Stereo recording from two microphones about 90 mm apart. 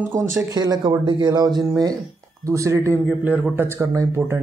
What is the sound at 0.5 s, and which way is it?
Speech, 50° right (ahead or behind).